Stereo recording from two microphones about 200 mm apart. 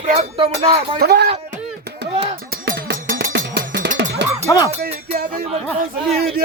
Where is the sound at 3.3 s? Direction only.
60° right (ahead or behind).